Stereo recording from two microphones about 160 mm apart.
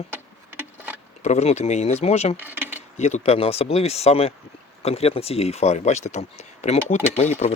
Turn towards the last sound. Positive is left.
turn(degrees=45)  # may be behind; listen again after turning